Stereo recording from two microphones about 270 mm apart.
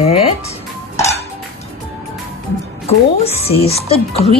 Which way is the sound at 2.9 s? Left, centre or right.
Left.